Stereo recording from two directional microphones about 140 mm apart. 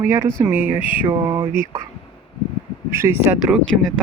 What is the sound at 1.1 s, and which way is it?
Mantra, 25° right (ahead or behind).